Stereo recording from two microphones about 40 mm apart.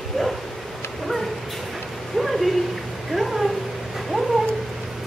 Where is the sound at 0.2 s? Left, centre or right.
Centre.